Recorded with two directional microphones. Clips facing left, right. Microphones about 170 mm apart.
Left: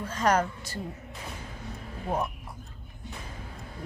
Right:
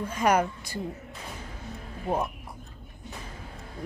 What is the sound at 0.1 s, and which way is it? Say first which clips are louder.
Speech: right 1 dB; 10° right (ahead or behind).